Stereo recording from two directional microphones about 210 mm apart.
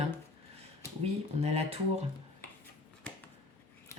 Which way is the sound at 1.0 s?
30° right (ahead or behind).